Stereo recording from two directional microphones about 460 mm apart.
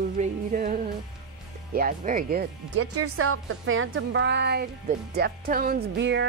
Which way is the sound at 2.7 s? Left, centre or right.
Right.